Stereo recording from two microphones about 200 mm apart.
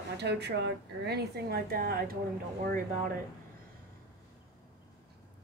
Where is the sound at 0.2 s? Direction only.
55° right (ahead or behind).